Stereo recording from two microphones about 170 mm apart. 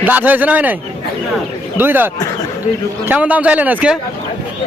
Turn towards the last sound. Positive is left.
turn(degrees=-10)  # may be behind; listen again after turning